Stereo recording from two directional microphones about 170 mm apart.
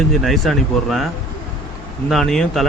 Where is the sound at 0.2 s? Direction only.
Centre (ahead or behind).